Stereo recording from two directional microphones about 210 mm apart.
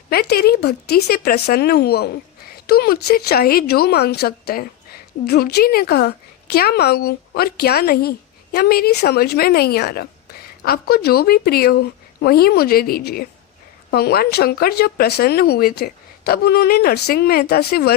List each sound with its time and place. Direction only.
0.1 s a woman's voice: 50° left (ahead or behind)